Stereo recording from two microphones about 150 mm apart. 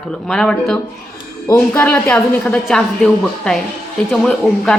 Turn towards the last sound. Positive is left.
turn(degrees=5)  # may be behind; listen again after turning